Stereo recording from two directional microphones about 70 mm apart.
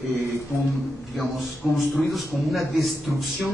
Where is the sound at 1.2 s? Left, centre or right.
Centre.